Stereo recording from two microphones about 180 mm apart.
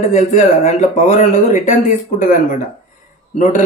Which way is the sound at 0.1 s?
40° left (ahead or behind).